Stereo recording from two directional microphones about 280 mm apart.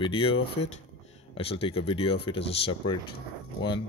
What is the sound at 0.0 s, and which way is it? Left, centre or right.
Speech, centre.